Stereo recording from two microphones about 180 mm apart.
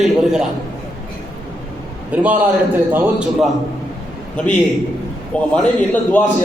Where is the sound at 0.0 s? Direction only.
5° right (ahead or behind).